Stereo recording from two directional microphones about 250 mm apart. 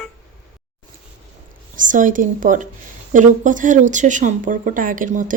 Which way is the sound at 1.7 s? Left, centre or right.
Right.